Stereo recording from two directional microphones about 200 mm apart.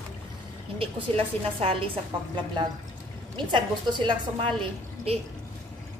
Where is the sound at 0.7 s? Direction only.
30° right (ahead or behind).